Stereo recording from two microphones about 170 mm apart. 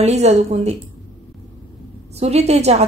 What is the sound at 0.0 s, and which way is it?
Speech, 40° right (ahead or behind).